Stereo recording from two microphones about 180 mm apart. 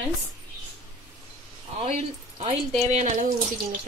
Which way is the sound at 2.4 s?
35° right (ahead or behind).